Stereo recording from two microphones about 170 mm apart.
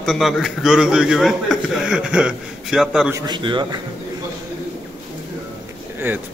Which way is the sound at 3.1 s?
20° right (ahead or behind).